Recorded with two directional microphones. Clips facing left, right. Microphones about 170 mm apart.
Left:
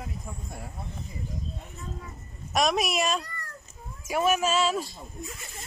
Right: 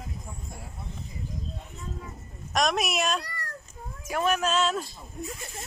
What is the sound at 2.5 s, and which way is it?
Speech, centre (ahead or behind).